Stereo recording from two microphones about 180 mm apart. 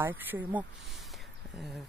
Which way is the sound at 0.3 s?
10° right (ahead or behind).